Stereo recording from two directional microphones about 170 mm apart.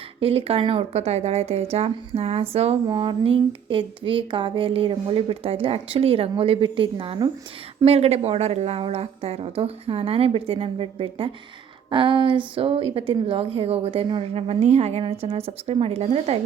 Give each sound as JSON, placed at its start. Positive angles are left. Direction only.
{"t": 0.2, "sound": "a woman's voice", "side_deg": -35}